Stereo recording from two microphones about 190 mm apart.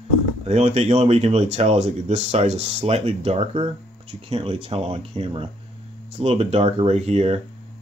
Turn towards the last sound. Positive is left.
turn(degrees=-35)  # may be behind; listen again after turning